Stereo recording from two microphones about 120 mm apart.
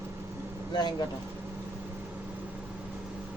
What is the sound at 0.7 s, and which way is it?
Speech, 35° left (ahead or behind).